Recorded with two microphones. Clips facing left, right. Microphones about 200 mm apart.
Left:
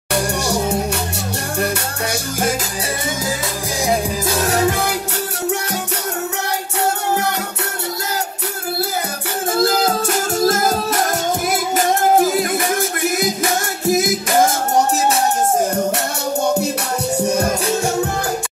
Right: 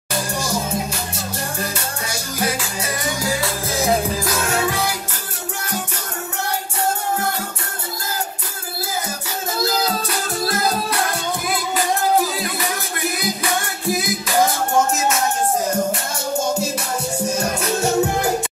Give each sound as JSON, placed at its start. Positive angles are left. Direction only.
{"t": 0.1, "sound": "music", "side_deg": 70}
{"t": 4.3, "sound": "music", "side_deg": 35}
{"t": 9.6, "sound": "music", "side_deg": 50}
{"t": 15.0, "sound": "music", "side_deg": 35}